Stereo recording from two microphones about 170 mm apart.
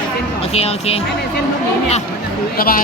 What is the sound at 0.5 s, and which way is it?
Speech, 35° left (ahead or behind).